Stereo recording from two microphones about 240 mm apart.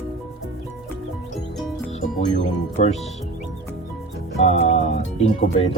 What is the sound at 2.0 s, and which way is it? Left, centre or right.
Speech, left.